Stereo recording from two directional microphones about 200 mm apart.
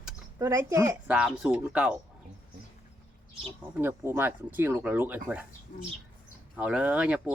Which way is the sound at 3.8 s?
10° right (ahead or behind).